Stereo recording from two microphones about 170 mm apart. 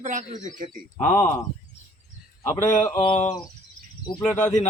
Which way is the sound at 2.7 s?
45° left (ahead or behind).